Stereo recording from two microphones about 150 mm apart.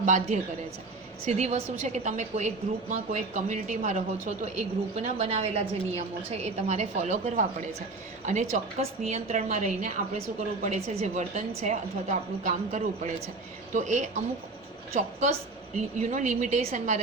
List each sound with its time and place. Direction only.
0.0 s a woman's voice: 55° right (ahead or behind)